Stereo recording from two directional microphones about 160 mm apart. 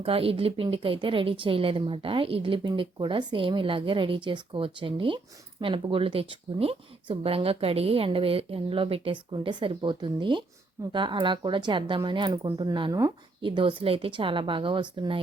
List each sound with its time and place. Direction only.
0.0 s a woman's voice: 35° right (ahead or behind)